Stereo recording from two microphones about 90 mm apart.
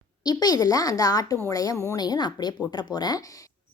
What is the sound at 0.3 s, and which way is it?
Speech, 50° left (ahead or behind).